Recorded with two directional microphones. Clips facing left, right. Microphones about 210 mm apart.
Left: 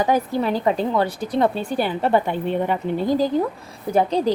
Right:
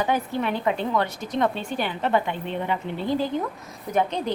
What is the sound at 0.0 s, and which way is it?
A woman's voice, 35° left (ahead or behind).